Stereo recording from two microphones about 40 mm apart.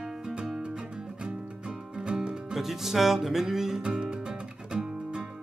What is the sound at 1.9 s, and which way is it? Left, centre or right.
Music, right.